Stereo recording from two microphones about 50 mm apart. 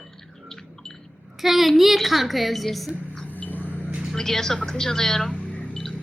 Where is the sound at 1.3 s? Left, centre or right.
Centre.